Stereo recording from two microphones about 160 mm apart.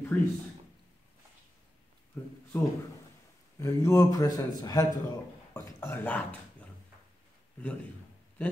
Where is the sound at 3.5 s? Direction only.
20° left (ahead or behind).